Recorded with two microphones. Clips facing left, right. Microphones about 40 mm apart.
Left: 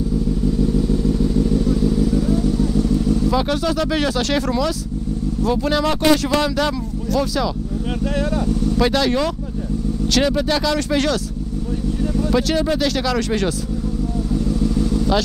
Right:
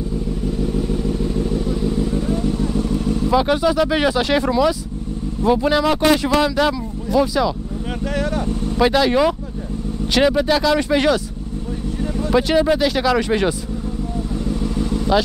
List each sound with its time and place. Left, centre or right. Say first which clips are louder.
0.5 s vehicle: left 2 dB; right
3.3 s speech: right 3 dB; centre
8.3 s speech: left 2 dB; right
8.8 s speech: right 5 dB; centre
14.3 s vehicle: left 4 dB; right